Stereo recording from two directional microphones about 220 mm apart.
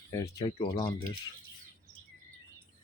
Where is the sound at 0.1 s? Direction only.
15° left (ahead or behind).